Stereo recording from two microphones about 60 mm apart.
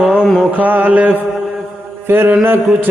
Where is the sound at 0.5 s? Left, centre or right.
Right.